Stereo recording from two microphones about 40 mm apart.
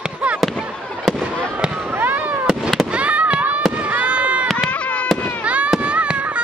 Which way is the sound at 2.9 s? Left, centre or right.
Right.